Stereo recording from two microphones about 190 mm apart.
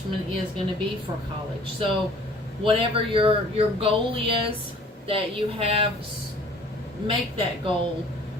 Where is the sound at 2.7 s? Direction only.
30° right (ahead or behind).